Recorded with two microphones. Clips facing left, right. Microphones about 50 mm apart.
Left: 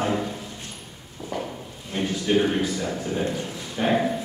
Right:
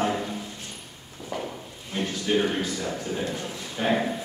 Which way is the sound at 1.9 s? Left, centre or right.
Centre.